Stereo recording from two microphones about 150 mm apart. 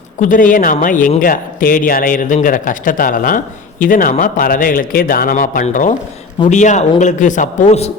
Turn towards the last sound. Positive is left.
turn(degrees=45)  # may be behind; listen again after turning